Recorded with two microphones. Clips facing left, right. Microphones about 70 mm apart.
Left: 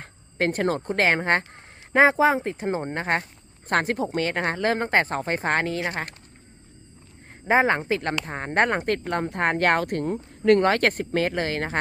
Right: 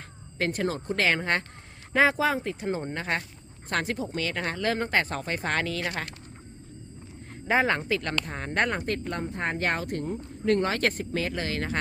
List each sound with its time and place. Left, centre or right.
0.0 s speech: left
7.4 s speech: left